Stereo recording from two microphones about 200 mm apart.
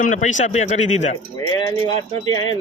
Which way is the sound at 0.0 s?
40° left (ahead or behind).